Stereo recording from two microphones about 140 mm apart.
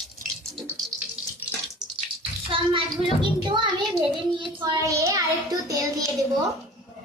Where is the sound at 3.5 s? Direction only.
35° right (ahead or behind).